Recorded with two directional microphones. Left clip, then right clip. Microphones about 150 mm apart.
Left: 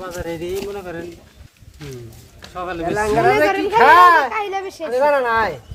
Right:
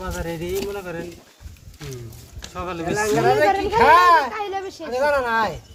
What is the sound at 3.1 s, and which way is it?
Speech, 20° left (ahead or behind).